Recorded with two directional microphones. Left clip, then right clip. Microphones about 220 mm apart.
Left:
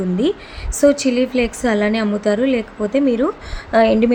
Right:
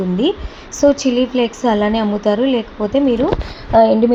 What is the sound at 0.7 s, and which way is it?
Speech, 20° left (ahead or behind).